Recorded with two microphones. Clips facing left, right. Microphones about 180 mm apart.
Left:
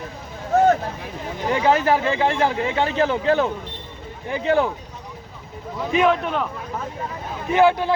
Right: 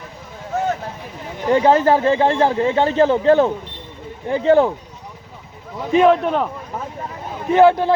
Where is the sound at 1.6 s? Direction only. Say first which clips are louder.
Right 3 dB; 30° right (ahead or behind).